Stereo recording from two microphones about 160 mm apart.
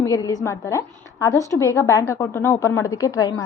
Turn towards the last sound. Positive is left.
turn(degrees=20)  # may be behind; listen again after turning